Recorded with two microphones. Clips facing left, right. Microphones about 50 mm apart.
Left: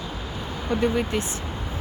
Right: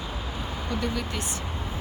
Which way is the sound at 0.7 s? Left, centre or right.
Left.